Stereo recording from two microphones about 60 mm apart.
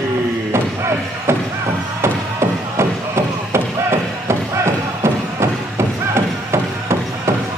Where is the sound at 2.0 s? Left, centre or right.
Right.